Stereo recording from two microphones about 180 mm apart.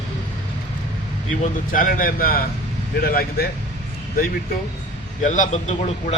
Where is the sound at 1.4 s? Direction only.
50° left (ahead or behind).